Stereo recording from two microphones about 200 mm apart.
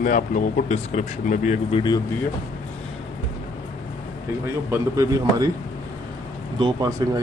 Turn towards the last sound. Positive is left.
turn(degrees=-20)  # may be behind; listen again after turning